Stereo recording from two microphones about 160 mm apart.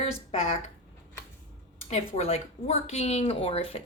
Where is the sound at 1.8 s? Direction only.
40° left (ahead or behind).